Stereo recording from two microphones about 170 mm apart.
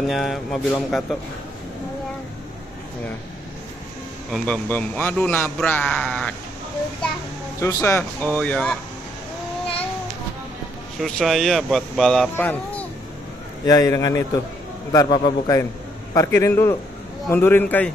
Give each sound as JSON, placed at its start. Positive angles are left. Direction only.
{"t": 0.0, "sound": "speech", "side_deg": 0}
{"t": 4.3, "sound": "a man's voice", "side_deg": 10}
{"t": 7.6, "sound": "a man's voice", "side_deg": 15}
{"t": 11.0, "sound": "speech", "side_deg": 0}
{"t": 13.7, "sound": "a man's voice", "side_deg": 20}